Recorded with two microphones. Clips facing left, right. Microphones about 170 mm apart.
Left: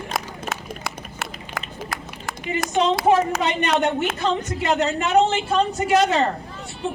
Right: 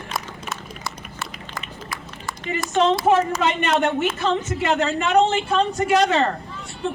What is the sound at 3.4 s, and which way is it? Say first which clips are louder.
A man's voice: even; 40° left (ahead or behind).